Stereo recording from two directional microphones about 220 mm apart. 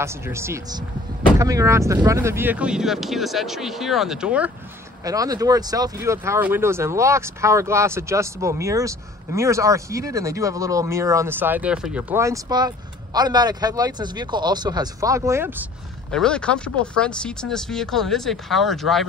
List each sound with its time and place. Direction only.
0.0 s speech: 10° right (ahead or behind)
5.0 s speech: 15° right (ahead or behind)
16.1 s speech: 5° left (ahead or behind)